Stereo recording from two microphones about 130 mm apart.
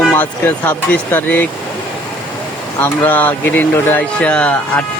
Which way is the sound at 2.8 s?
15° left (ahead or behind).